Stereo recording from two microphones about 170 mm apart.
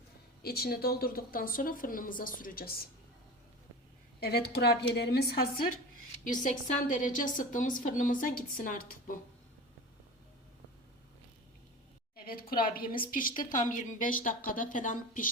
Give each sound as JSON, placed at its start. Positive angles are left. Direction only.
{"t": 0.4, "sound": "a woman's voice", "side_deg": 65}
{"t": 4.2, "sound": "a woman's voice", "side_deg": 70}
{"t": 6.4, "sound": "a woman's voice", "side_deg": 50}
{"t": 12.1, "sound": "a woman's voice", "side_deg": 60}